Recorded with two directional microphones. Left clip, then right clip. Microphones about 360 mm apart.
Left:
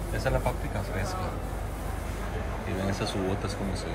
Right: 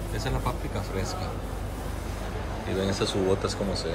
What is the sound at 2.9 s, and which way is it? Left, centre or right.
Speech, centre.